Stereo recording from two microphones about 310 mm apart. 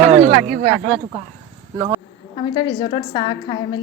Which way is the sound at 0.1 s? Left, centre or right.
Right.